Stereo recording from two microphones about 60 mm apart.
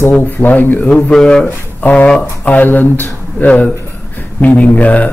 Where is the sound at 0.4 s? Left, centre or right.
Left.